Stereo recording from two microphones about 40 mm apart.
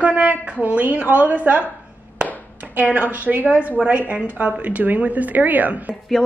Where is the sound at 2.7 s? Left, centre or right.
Right.